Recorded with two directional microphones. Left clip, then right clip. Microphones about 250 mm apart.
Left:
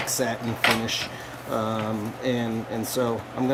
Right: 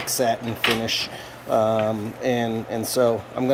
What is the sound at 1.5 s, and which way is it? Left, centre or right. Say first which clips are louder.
Speech: right 8 dB; centre.